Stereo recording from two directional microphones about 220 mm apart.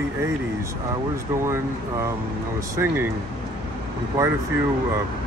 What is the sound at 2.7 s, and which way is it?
Speech, 10° right (ahead or behind).